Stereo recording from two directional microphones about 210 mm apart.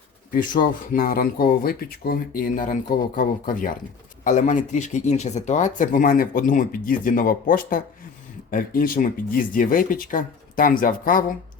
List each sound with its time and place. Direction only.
0.3 s speech: 40° left (ahead or behind)